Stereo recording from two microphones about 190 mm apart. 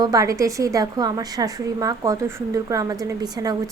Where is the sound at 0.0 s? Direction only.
20° right (ahead or behind).